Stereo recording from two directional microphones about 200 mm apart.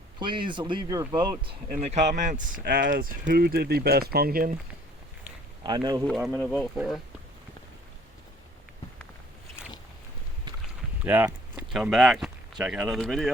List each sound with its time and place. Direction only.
0.2 s speech: 25° right (ahead or behind)
1.6 s speech: 35° right (ahead or behind)
5.6 s speech: 20° right (ahead or behind)
6.1 s speech: centre (ahead or behind)
11.0 s speech: 10° right (ahead or behind)